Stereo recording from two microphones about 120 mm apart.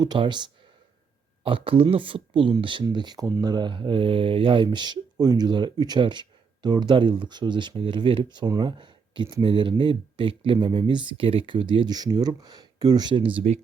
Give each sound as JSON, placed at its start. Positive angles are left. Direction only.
{"t": 0.0, "sound": "speech", "side_deg": -40}